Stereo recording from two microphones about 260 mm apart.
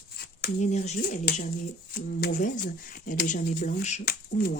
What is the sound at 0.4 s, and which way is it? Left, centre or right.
Speech, left.